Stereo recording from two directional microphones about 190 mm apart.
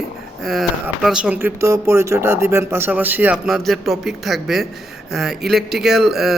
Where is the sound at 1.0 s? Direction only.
5° right (ahead or behind).